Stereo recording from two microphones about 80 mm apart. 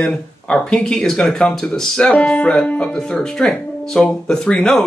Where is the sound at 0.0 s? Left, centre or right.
Centre.